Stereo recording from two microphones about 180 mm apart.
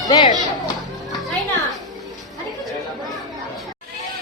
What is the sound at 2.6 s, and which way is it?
Chatter, centre (ahead or behind).